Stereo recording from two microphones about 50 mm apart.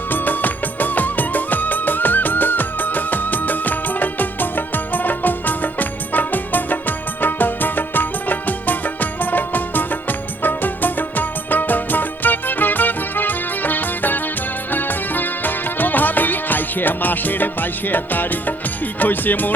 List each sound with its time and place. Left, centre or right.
0.1 s music: left